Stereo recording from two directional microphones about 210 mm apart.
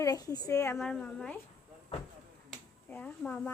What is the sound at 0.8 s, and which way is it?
Speech, 5° left (ahead or behind).